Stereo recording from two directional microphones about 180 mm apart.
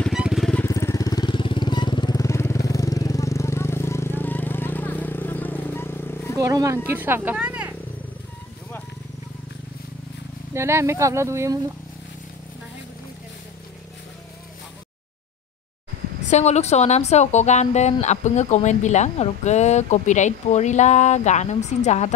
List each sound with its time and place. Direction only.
0.0 s vehicle: 5° right (ahead or behind)
0.7 s vehicle: 15° left (ahead or behind)
6.3 s speech: 20° right (ahead or behind)
10.5 s speech: 15° right (ahead or behind)
16.3 s speech: 40° left (ahead or behind)